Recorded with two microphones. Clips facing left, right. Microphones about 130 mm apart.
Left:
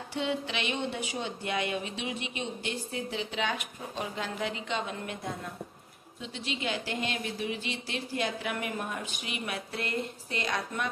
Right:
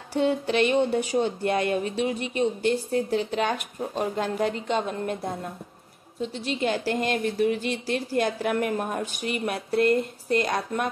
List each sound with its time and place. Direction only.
0.1 s speech: 45° right (ahead or behind)